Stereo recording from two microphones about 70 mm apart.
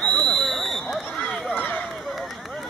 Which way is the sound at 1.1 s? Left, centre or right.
Centre.